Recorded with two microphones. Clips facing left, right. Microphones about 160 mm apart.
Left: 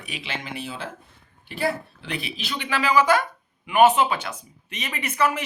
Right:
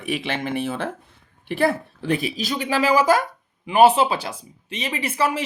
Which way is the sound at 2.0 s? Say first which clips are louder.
Right 10 dB; 45° right (ahead or behind).